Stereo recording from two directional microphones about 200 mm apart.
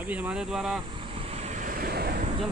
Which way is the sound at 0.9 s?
25° right (ahead or behind).